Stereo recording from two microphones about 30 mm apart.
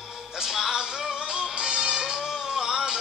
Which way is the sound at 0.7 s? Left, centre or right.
Right.